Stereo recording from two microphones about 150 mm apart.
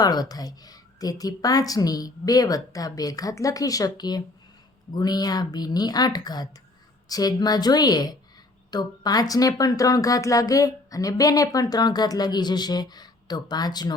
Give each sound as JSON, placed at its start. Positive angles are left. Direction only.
{"t": 0.0, "sound": "speech", "side_deg": 25}